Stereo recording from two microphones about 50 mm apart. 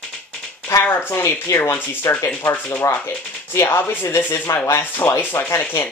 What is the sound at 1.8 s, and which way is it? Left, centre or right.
Speech, left.